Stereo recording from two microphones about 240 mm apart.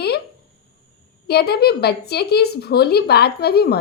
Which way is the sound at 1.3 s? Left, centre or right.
Left.